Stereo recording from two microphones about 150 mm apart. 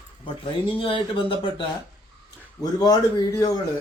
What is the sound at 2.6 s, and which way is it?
A man's voice, 25° left (ahead or behind).